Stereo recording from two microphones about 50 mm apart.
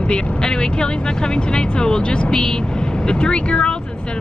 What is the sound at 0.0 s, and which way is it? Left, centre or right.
Speech, centre.